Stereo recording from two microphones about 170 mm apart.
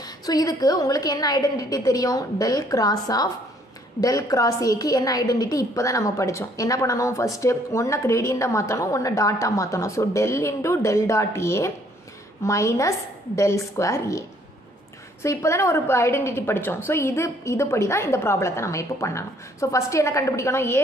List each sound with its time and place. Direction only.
0.0 s a woman's voice: 20° left (ahead or behind)
15.2 s a woman's voice: 15° left (ahead or behind)